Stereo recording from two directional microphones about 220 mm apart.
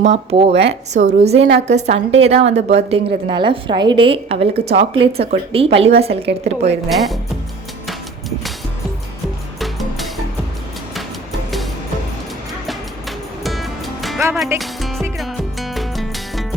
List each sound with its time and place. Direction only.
0.0 s a woman's voice: 30° right (ahead or behind)
0.5 s a woman's voice: 50° right (ahead or behind)
0.9 s a woman's voice: 30° right (ahead or behind)
1.4 s a woman's voice: 55° right (ahead or behind)
1.6 s a woman's voice: 30° right (ahead or behind)
6.8 s speech: centre (ahead or behind)
13.4 s music: centre (ahead or behind)